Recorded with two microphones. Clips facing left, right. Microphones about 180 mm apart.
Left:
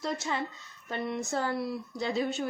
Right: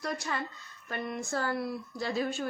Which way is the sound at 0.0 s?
25° left (ahead or behind).